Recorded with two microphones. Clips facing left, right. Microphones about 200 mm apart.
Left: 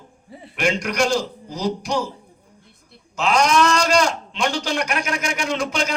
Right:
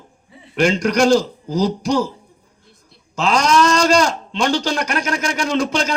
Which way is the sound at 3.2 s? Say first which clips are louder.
Right 2 dB; 35° right (ahead or behind).